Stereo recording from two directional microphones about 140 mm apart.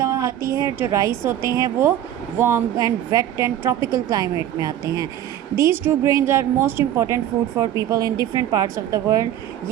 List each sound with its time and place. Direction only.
0.0 s a woman's voice: 25° right (ahead or behind)